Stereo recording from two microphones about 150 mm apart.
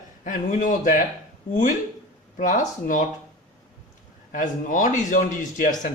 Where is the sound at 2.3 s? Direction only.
50° left (ahead or behind).